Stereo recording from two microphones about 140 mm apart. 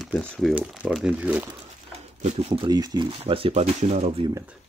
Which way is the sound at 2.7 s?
30° right (ahead or behind).